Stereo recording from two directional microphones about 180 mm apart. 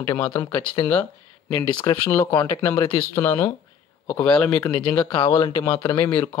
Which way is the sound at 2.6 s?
10° left (ahead or behind).